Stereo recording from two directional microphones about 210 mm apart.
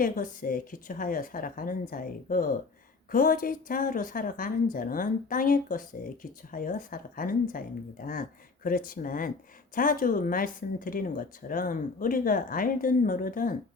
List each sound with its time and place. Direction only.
0.0 s speech: 40° left (ahead or behind)